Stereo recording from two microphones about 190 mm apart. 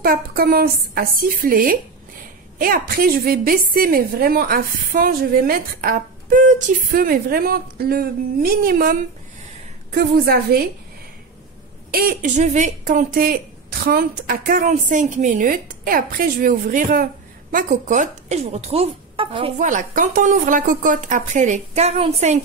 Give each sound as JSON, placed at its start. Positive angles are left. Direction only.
{"t": 0.0, "sound": "speech", "side_deg": -50}
{"t": 11.9, "sound": "speech", "side_deg": -50}
{"t": 19.6, "sound": "speech", "side_deg": -40}